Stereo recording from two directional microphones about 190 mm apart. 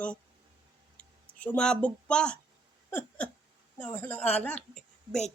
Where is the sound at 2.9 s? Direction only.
5° left (ahead or behind).